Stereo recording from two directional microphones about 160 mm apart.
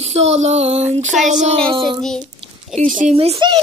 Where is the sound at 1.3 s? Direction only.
45° right (ahead or behind).